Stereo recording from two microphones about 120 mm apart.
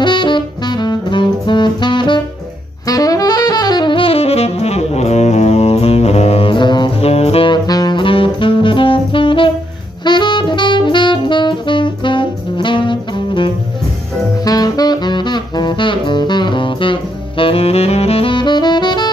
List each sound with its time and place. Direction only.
0.0 s saxophone: 40° left (ahead or behind)
2.9 s saxophone: 30° left (ahead or behind)
7.0 s music: 60° left (ahead or behind)
7.4 s saxophone: 35° left (ahead or behind)
14.4 s saxophone: 30° left (ahead or behind)